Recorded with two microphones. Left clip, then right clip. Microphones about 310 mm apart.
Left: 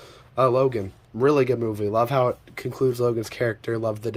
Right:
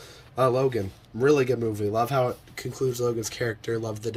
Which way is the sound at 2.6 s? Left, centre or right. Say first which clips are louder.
Left 4 dB; centre.